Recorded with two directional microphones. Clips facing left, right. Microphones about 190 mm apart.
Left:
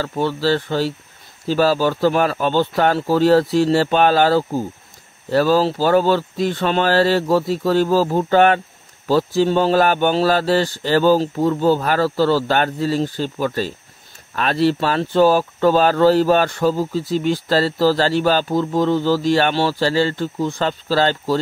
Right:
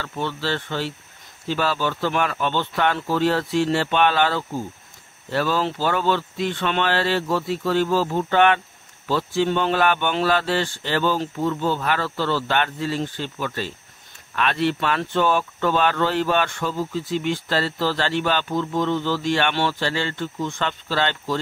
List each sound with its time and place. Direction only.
0.0 s speech: 40° left (ahead or behind)